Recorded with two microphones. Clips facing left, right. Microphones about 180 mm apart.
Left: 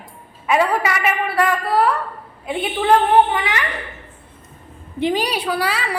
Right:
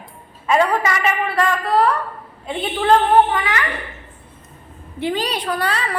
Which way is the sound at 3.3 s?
20° left (ahead or behind).